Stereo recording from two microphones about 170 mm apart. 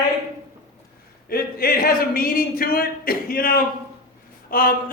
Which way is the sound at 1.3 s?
60° left (ahead or behind).